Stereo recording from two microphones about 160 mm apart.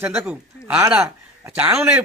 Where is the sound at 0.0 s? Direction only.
15° right (ahead or behind).